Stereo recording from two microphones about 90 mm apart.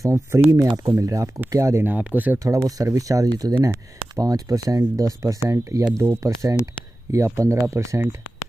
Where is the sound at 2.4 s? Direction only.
35° right (ahead or behind).